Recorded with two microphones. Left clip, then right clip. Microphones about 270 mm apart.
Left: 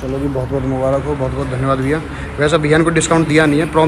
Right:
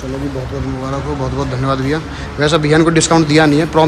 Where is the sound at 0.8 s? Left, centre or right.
Centre.